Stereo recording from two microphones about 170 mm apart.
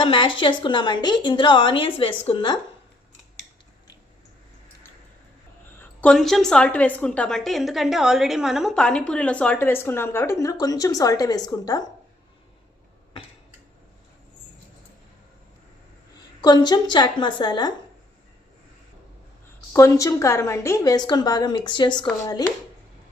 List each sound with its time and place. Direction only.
0.0 s a woman's voice: 30° left (ahead or behind)
5.8 s a woman's voice: 5° left (ahead or behind)
16.4 s a woman's voice: 25° left (ahead or behind)
19.7 s a woman's voice: 20° left (ahead or behind)